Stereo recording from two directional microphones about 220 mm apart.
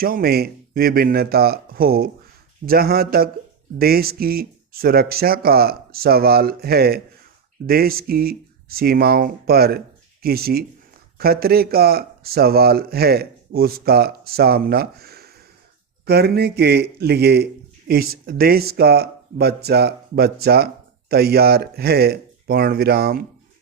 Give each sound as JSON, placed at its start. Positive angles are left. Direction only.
{"t": 0.0, "sound": "a man's voice", "side_deg": -45}